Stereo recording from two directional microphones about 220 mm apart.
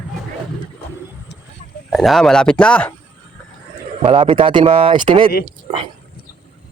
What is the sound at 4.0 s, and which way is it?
Speech, 25° right (ahead or behind).